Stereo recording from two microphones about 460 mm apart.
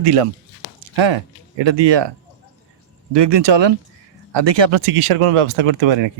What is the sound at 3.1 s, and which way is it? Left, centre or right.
Speech, right.